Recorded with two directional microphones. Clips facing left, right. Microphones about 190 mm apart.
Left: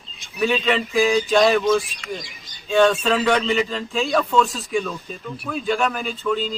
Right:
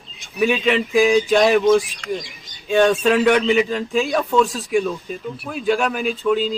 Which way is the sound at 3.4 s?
15° right (ahead or behind).